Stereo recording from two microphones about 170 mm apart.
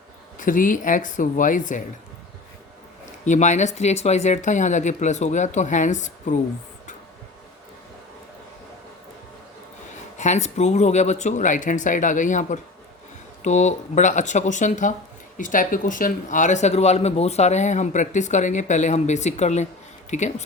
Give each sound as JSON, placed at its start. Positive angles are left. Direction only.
{"t": 0.3, "sound": "speech", "side_deg": 50}
{"t": 3.2, "sound": "speech", "side_deg": 45}
{"t": 10.2, "sound": "speech", "side_deg": 40}